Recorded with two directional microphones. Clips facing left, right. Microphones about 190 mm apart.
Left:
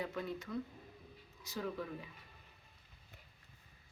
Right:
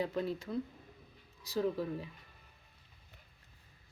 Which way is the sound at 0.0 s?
30° right (ahead or behind).